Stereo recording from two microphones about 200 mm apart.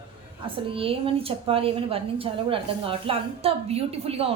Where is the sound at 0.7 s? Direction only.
25° right (ahead or behind).